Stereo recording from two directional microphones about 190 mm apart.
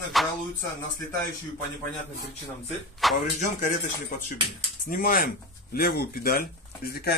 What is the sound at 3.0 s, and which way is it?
Speech, centre (ahead or behind).